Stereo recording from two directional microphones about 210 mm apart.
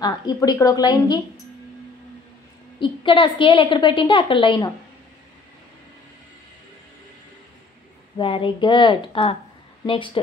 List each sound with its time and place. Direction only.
0.0 s a woman's voice: 20° left (ahead or behind)
2.8 s a woman's voice: 20° left (ahead or behind)
8.2 s a woman's voice: 25° left (ahead or behind)